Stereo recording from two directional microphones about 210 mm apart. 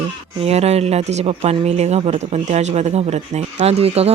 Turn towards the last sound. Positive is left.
turn(degrees=-30)  # may be behind; listen again after turning